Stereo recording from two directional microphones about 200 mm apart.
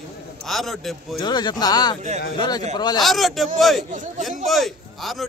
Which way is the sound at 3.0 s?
Centre (ahead or behind).